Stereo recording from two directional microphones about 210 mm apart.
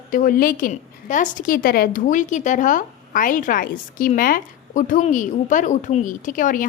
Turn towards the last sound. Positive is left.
turn(degrees=40)  # may be behind; listen again after turning